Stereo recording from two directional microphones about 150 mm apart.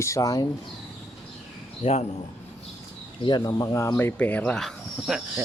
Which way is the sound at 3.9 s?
10° left (ahead or behind).